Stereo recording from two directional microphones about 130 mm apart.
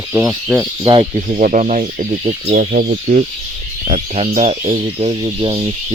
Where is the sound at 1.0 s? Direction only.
80° right; by 2.5 s 55° right (ahead or behind).